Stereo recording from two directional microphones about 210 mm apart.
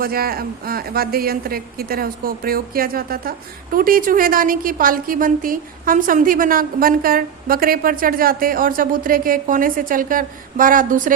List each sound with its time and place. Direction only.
0.0 s a woman's voice: 45° right (ahead or behind)